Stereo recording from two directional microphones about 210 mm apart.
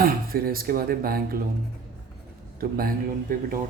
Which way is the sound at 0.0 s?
45° right (ahead or behind).